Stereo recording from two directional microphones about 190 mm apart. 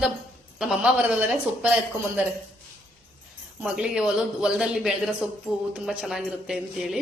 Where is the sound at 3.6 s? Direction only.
5° right (ahead or behind).